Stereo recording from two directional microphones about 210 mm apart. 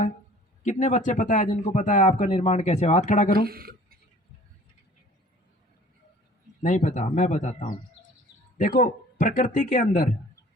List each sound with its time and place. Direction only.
0.6 s speech: 35° left (ahead or behind)
3.4 s speech: 45° right (ahead or behind)
6.6 s speech: 35° left (ahead or behind)